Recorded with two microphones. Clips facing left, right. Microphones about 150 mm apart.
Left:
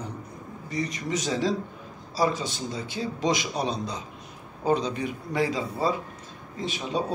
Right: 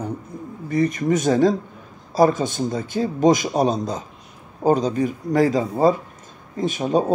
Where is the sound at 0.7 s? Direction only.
50° right (ahead or behind).